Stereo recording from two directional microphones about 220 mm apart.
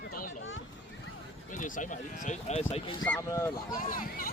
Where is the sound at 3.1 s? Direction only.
10° left (ahead or behind).